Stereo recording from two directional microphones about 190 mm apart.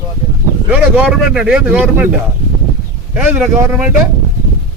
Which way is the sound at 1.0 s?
Centre (ahead or behind).